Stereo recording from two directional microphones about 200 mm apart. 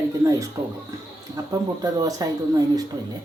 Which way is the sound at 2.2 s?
20° right (ahead or behind).